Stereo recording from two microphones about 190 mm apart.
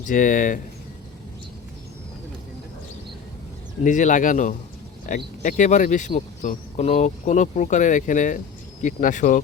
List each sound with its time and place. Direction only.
0.0 s speech: 45° left (ahead or behind)
3.8 s speech: 40° left (ahead or behind)